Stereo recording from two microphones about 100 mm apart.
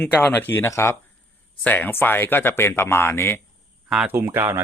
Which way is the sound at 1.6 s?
15° left (ahead or behind).